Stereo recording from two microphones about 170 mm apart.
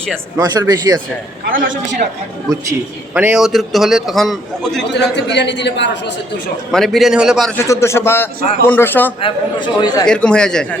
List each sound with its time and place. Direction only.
0.3 s speech: 20° right (ahead or behind)
1.5 s a man's voice: 55° right (ahead or behind)
3.2 s a man's voice: 5° right (ahead or behind)
4.9 s a man's voice: 90° left
6.7 s a man's voice: 5° left (ahead or behind)
7.5 s a man's voice: 15° left (ahead or behind)
9.2 s a man's voice: 25° left (ahead or behind)
10.1 s a man's voice: 5° left (ahead or behind)